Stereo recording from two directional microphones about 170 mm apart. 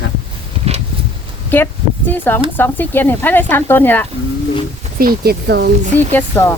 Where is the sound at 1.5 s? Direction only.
10° left (ahead or behind).